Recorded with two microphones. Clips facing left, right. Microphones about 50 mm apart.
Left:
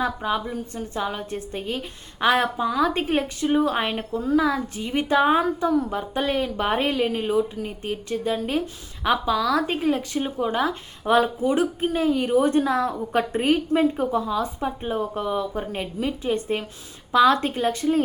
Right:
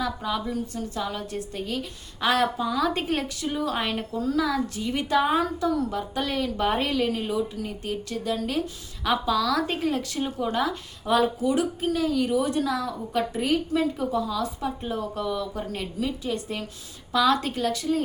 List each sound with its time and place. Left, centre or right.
0.0 s a woman's voice: left